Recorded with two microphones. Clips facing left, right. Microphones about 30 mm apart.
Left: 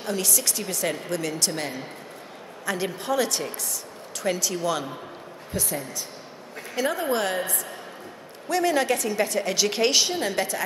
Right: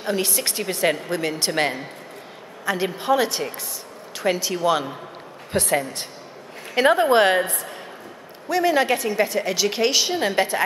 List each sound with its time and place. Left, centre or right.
0.0 s a woman's voice: right
1.6 s a woman's voice: right
2.6 s a woman's voice: centre
5.5 s a woman's voice: right
6.7 s a woman's voice: right
8.5 s a woman's voice: centre
8.8 s a woman's voice: right; by 10.1 s centre
10.1 s a woman's voice: right